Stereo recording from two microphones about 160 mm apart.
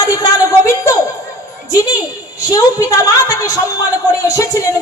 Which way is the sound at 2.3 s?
20° left (ahead or behind).